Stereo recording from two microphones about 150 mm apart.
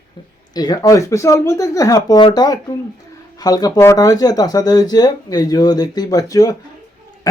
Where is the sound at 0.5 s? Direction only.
25° left (ahead or behind).